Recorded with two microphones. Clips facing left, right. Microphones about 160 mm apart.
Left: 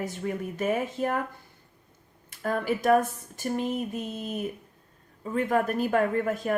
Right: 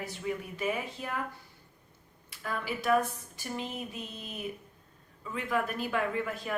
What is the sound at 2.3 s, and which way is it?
Speech, 45° left (ahead or behind).